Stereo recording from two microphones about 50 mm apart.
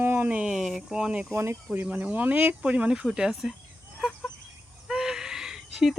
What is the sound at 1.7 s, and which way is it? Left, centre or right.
Speech, right.